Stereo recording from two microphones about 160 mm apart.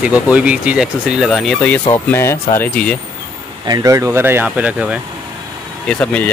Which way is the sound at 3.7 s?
20° right (ahead or behind).